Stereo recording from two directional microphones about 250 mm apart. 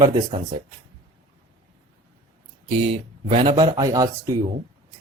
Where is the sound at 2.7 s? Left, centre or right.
Right.